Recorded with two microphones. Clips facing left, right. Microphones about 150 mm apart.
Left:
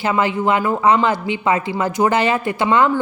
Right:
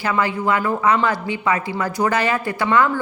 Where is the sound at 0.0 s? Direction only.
25° left (ahead or behind).